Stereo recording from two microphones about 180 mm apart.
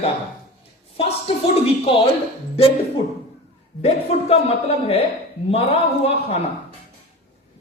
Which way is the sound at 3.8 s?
35° left (ahead or behind).